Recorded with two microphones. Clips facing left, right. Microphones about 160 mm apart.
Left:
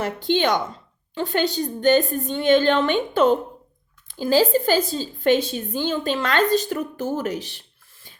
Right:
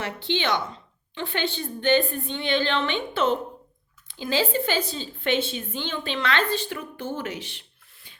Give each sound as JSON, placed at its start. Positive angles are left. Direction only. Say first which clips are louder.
{"t": 0.0, "sound": "a woman's voice", "louder": "left 6 dB", "side_deg": 45}